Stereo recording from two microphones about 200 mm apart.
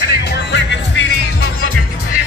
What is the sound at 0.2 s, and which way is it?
Music, 60° left (ahead or behind).